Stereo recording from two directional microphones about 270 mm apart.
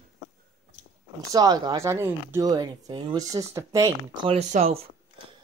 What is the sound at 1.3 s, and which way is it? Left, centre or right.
Speech, centre.